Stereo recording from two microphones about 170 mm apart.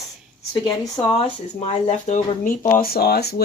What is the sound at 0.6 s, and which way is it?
Speech, 30° left (ahead or behind).